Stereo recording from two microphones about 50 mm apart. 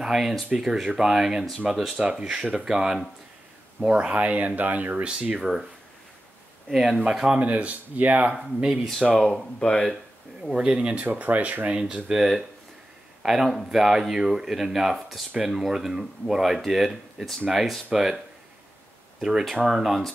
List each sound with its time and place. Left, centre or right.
0.0 s speech: centre; by 5.4 s right
5.4 s speech: centre
7.0 s speech: centre
7.3 s speech: right
9.0 s speech: centre
10.5 s speech: centre
11.1 s speech: right
11.7 s speech: right
12.1 s speech: centre
19.6 s speech: centre